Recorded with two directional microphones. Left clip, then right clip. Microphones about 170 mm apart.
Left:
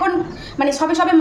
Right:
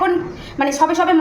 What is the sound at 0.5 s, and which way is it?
Speech, 10° left (ahead or behind).